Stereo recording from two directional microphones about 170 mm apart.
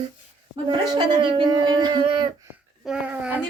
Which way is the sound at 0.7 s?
25° right (ahead or behind).